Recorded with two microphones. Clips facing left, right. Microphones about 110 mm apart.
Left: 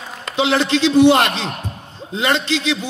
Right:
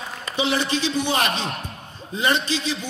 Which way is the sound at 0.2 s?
65° left (ahead or behind).